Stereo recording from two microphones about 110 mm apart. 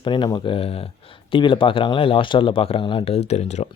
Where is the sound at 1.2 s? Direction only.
50° left (ahead or behind).